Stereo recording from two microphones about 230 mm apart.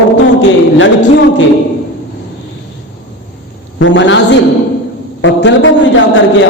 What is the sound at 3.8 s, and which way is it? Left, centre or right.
A man's voice, left.